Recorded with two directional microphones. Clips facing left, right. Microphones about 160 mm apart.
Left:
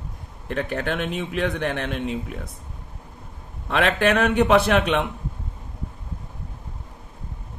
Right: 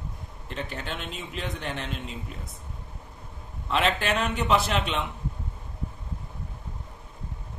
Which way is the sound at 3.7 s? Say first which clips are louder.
Left 5 dB; 55° left (ahead or behind).